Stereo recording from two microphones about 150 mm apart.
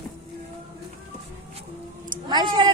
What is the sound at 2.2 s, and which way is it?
Speech, 30° right (ahead or behind).